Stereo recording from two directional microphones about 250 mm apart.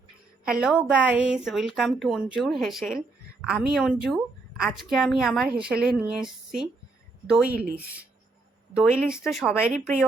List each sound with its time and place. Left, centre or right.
0.4 s a woman's voice: centre
7.4 s speech: right
8.7 s a woman's voice: centre